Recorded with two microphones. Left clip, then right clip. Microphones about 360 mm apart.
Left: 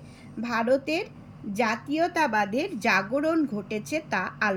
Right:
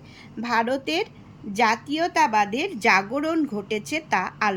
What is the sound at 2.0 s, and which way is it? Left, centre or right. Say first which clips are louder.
Speech: right 5 dB; right.